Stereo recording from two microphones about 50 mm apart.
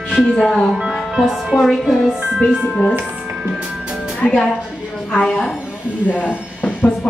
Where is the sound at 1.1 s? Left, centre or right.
Centre.